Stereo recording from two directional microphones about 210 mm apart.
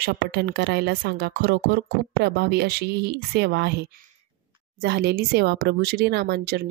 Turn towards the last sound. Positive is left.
turn(degrees=-50)  # may be behind; listen again after turning